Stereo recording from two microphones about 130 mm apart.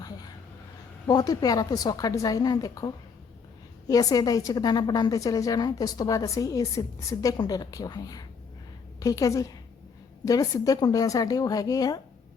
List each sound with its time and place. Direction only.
1.0 s a woman's voice: 30° left (ahead or behind)